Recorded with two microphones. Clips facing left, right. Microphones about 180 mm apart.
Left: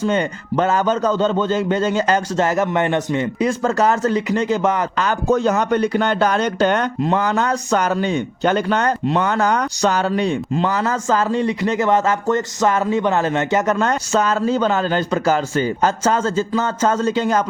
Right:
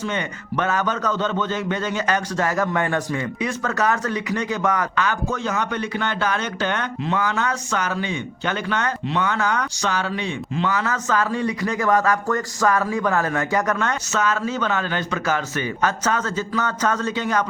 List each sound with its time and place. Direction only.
0.0 s a man's voice: 35° left (ahead or behind)
5.3 s a man's voice: 40° left (ahead or behind)